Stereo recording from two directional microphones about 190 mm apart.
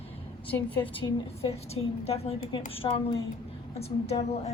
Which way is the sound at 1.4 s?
35° left (ahead or behind).